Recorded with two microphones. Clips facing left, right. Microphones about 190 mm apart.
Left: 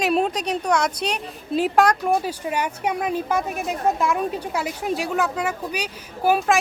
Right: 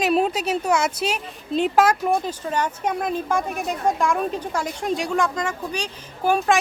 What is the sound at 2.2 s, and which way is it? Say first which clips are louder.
A woman's voice: even; 10° left (ahead or behind).